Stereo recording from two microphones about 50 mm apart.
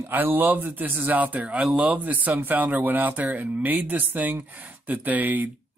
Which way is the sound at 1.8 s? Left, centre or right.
Right.